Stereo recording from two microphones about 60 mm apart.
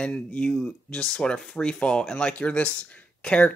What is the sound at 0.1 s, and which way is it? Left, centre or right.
Speech, left.